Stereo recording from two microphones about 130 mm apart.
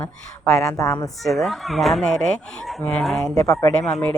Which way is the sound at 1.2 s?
Centre (ahead or behind).